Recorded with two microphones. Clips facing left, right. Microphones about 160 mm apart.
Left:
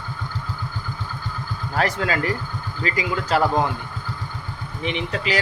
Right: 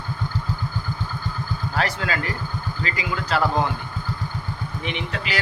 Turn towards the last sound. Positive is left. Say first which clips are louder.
# left 4 dB
turn(degrees=35)  # may be behind; listen again after turning